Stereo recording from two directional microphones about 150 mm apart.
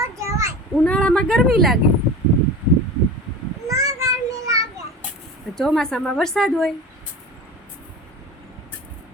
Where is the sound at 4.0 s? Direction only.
20° right (ahead or behind).